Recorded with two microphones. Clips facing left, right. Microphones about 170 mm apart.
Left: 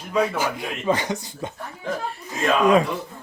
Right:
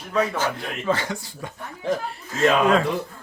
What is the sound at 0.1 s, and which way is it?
Speech, 10° left (ahead or behind).